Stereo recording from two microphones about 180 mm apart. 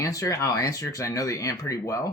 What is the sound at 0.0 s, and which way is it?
Speech, 20° left (ahead or behind).